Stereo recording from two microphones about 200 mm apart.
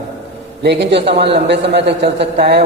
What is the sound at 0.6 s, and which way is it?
A man's voice, 60° right (ahead or behind).